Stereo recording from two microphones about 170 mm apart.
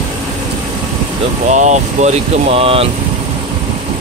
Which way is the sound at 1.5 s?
45° right (ahead or behind).